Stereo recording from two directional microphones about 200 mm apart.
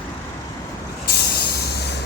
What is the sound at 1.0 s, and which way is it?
Vehicle, 50° left (ahead or behind).